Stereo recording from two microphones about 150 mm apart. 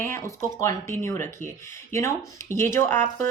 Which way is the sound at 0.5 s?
20° left (ahead or behind).